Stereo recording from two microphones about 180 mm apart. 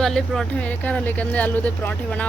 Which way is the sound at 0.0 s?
Centre (ahead or behind).